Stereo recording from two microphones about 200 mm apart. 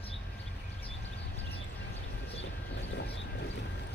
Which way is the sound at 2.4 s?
60° left (ahead or behind).